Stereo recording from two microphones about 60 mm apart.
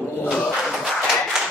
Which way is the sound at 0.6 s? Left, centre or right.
Centre.